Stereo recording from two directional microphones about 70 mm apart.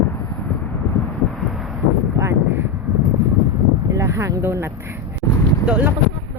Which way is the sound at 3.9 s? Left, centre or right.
Right.